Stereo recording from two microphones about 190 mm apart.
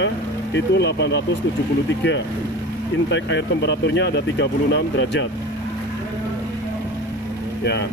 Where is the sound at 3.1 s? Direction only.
65° left (ahead or behind).